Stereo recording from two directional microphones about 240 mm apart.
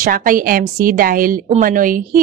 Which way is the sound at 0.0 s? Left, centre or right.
Right.